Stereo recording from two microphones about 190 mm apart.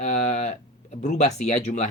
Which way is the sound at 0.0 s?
35° left (ahead or behind).